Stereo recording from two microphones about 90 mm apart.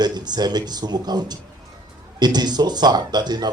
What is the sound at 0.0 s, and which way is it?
A man's voice, 50° right (ahead or behind).